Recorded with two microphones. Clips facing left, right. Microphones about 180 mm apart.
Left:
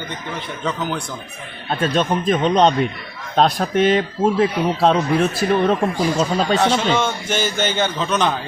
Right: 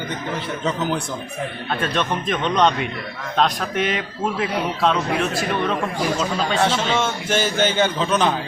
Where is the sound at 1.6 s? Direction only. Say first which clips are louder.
Left 5 dB; 35° left (ahead or behind).